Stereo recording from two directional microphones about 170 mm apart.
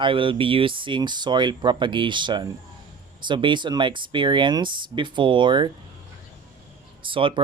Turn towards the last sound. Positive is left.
turn(degrees=-30)  # may be behind; listen again after turning